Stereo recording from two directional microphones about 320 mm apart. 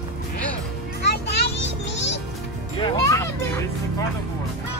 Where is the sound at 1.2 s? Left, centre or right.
Left.